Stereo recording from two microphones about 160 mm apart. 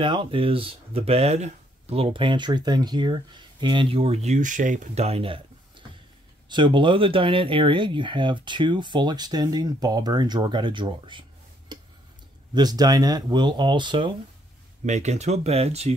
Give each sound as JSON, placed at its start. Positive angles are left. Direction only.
{"t": 0.0, "sound": "speech", "side_deg": -30}
{"t": 11.7, "sound": "tick-tock", "side_deg": -25}
{"t": 12.5, "sound": "speech", "side_deg": -25}
{"t": 14.9, "sound": "speech", "side_deg": -45}